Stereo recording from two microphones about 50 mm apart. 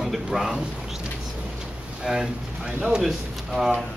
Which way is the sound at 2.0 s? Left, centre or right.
Centre.